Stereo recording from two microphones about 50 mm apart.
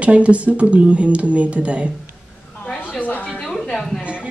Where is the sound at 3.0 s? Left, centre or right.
Left.